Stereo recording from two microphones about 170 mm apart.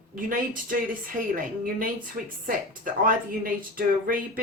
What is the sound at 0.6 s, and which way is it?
Speech, 55° right (ahead or behind).